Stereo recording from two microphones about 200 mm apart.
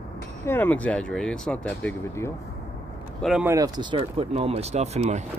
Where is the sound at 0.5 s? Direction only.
10° left (ahead or behind).